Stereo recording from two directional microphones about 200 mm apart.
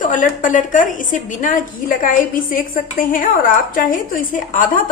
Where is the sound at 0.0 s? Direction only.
40° left (ahead or behind).